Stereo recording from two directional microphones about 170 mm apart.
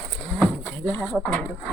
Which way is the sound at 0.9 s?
10° left (ahead or behind).